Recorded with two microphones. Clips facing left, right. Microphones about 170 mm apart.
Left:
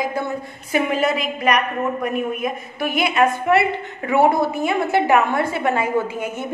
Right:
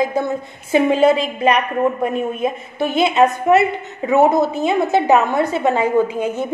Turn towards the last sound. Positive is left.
turn(degrees=-20)  # may be behind; listen again after turning